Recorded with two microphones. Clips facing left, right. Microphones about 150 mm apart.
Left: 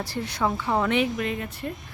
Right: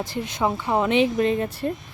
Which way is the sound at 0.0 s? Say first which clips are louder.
Right 2 dB; 20° right (ahead or behind).